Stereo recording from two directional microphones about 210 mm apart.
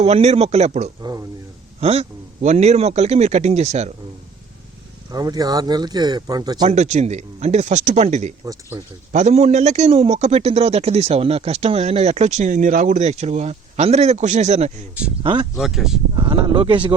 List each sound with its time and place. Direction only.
0.0 s a man's voice: 30° right (ahead or behind)
1.0 s speech: 15° right (ahead or behind)
1.8 s a man's voice: 30° right (ahead or behind)
5.1 s speech: 20° right (ahead or behind)
6.7 s a man's voice: 35° right (ahead or behind)
8.7 s speech: 10° right (ahead or behind)
9.1 s a man's voice: 35° right (ahead or behind)
15.2 s speech: 20° right (ahead or behind)
15.5 s speech: centre (ahead or behind)
16.1 s speech: 20° right (ahead or behind)